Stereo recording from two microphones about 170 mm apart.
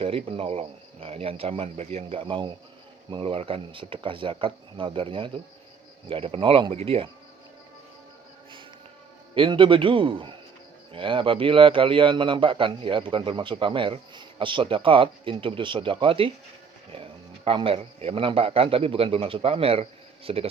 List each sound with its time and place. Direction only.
0.0 s speech: 35° right (ahead or behind)
9.3 s a man's voice: 30° right (ahead or behind)